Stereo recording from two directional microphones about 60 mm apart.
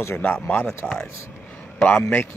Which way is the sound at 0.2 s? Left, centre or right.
Left.